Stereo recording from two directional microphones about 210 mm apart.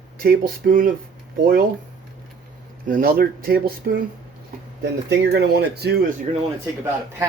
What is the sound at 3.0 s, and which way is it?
Speech, 45° right (ahead or behind).